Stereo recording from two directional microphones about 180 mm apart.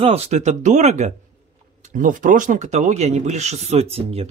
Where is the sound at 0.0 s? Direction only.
35° right (ahead or behind).